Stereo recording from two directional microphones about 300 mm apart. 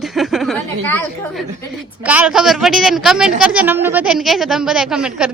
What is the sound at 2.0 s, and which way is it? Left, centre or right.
A woman's voice, centre.